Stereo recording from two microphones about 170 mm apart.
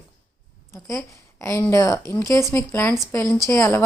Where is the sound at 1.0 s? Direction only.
20° left (ahead or behind).